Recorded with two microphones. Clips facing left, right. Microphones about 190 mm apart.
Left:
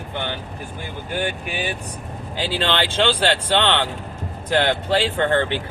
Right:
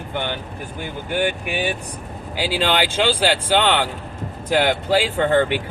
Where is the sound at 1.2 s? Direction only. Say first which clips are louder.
Right 4 dB; 15° right (ahead or behind).